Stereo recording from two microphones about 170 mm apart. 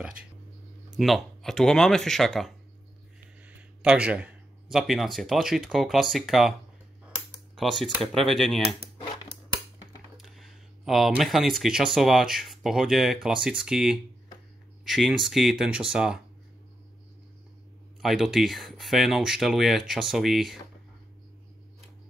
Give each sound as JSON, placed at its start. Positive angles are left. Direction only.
{"t": 0.9, "sound": "speech", "side_deg": 0}
{"t": 7.5, "sound": "speech", "side_deg": 0}
{"t": 10.1, "sound": "speech", "side_deg": 0}
{"t": 18.0, "sound": "speech", "side_deg": 0}